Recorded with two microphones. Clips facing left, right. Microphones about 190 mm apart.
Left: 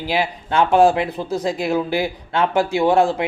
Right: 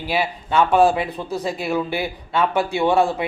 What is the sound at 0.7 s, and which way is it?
A man's voice, 15° left (ahead or behind).